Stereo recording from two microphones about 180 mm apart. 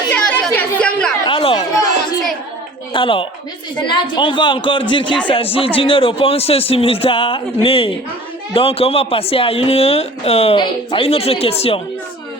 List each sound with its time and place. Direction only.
0.1 s chatter: 5° left (ahead or behind)
1.3 s chatter: 30° left (ahead or behind)
2.9 s a woman's voice: 30° left (ahead or behind)